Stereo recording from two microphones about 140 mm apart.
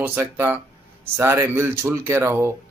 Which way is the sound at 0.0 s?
15° right (ahead or behind).